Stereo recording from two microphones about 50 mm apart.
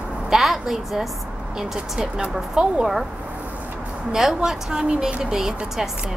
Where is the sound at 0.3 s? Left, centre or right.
Centre.